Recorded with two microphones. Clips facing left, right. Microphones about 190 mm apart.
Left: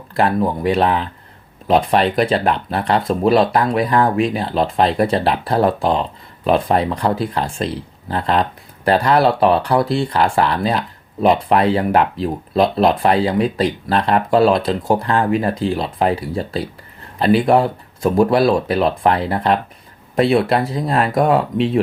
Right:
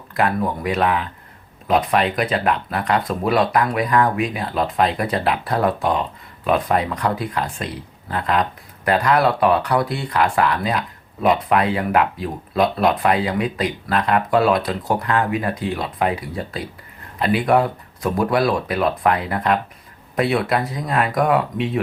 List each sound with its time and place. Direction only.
0.2 s speech: 30° left (ahead or behind)